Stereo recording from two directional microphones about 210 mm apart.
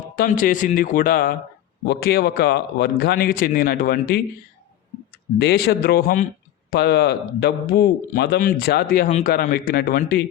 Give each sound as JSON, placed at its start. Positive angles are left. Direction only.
{"t": 0.2, "sound": "a man's voice", "side_deg": 40}
{"t": 5.4, "sound": "a man's voice", "side_deg": 50}